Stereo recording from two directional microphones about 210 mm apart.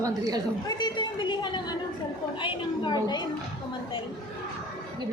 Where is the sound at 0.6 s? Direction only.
20° left (ahead or behind).